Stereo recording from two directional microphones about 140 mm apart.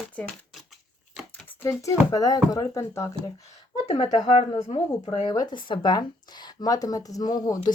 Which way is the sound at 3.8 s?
50° left (ahead or behind).